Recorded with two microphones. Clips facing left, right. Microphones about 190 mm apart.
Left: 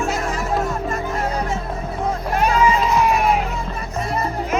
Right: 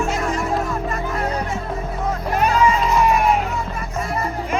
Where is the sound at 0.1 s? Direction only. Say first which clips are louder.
Right 1 dB; 5° left (ahead or behind).